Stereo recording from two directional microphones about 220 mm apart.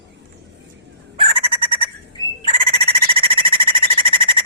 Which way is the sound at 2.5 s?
25° right (ahead or behind).